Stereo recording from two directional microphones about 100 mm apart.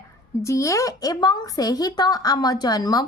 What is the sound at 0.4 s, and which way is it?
A woman's voice, 30° left (ahead or behind).